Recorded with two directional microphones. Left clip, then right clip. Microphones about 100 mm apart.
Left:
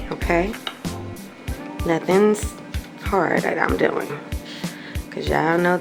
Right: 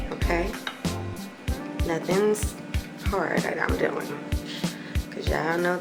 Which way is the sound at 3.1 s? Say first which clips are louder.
Left 7 dB; 70° left (ahead or behind).